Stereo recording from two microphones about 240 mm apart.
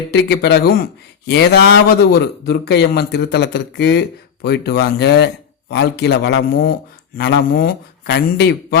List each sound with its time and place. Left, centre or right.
0.1 s a man's voice: left